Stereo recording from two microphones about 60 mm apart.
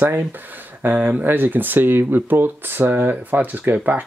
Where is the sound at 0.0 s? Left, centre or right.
Right.